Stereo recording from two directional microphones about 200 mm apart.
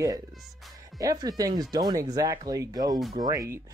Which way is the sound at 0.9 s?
20° right (ahead or behind).